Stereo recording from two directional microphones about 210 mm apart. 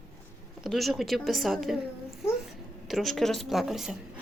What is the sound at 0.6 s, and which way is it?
A woman's voice, centre (ahead or behind).